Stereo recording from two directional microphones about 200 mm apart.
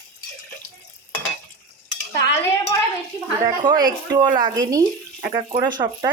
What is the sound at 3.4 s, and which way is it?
Speech, 20° right (ahead or behind).